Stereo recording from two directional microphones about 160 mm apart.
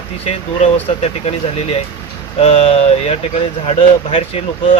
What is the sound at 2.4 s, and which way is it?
Speech, 35° left (ahead or behind).